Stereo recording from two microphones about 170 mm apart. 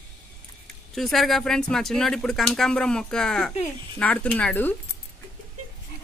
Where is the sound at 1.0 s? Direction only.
Centre (ahead or behind).